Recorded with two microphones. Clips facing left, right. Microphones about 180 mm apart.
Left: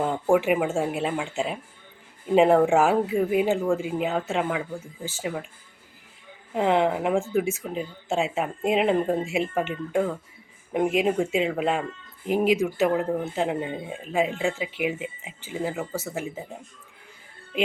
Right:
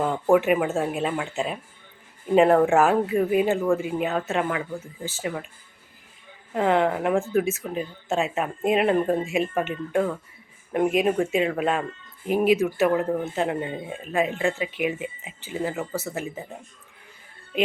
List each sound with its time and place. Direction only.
0.1 s speech: 10° left (ahead or behind)
3.1 s speech: centre (ahead or behind)
3.4 s speech: 15° left (ahead or behind)
6.5 s speech: 15° left (ahead or behind)